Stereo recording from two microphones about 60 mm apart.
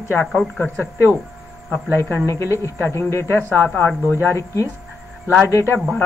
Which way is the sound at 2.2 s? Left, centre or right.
Left.